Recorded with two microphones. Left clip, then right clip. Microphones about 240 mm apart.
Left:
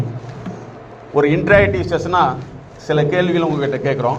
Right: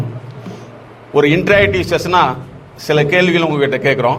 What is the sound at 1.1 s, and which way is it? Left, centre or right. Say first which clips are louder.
A man's voice: right 2 dB; right.